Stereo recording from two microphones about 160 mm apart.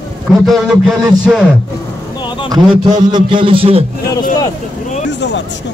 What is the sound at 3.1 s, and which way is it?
Speech, 30° right (ahead or behind).